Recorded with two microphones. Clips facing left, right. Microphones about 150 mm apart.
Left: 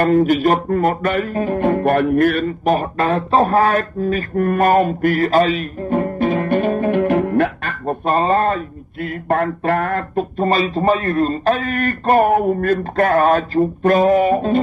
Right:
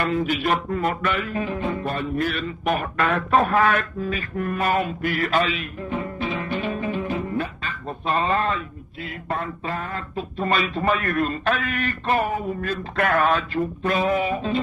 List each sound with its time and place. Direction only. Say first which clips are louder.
0.0 s speech: left 9 dB; 45° left (ahead or behind)
2.6 s speech: left 4 dB; 35° left (ahead or behind); by 7.7 s 70° left (ahead or behind)
8.2 s speech: left 6 dB; 35° left (ahead or behind)
9.3 s a sound: left 11 dB; 65° left (ahead or behind)
10.4 s speech: left 6 dB; 35° left (ahead or behind); by 12.8 s 55° left (ahead or behind)
12.9 s speech: left 5 dB; 35° left (ahead or behind)